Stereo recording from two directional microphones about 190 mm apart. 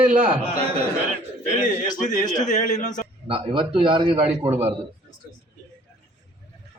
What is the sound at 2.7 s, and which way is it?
Speech, 40° left (ahead or behind).